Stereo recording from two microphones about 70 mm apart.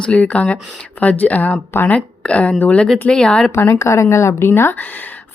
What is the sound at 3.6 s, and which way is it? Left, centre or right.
A woman's voice, left.